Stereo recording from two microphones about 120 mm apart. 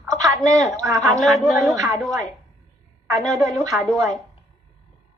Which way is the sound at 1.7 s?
25° right (ahead or behind).